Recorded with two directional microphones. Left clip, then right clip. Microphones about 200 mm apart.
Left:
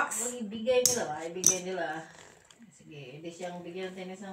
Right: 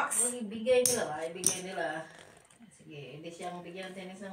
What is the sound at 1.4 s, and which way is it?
Speech, 30° left (ahead or behind).